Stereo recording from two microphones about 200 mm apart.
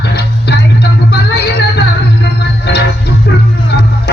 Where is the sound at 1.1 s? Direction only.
55° left (ahead or behind).